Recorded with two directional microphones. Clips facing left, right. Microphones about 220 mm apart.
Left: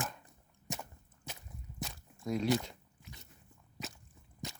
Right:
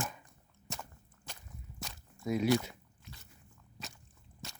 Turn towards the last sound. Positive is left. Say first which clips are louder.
# left 5 dB
turn(degrees=15)  # may be behind; listen again after turning